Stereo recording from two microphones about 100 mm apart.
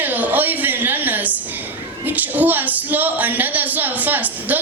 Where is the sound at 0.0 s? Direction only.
15° right (ahead or behind).